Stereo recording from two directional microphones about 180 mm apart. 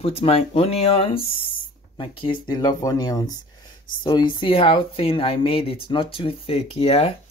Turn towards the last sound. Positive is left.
turn(degrees=35)  # may be behind; listen again after turning